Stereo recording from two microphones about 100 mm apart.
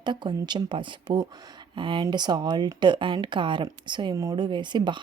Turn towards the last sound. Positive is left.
turn(degrees=-50)  # may be behind; listen again after turning